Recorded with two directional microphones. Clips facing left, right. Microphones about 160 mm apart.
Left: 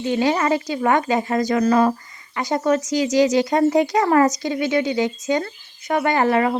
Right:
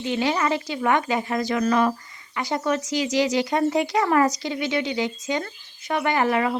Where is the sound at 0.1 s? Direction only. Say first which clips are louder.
Left 4 dB; 45° left (ahead or behind).